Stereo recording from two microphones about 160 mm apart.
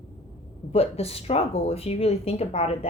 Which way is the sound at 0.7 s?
40° left (ahead or behind).